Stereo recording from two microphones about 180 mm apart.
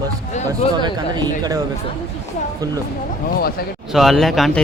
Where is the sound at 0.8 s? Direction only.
25° right (ahead or behind).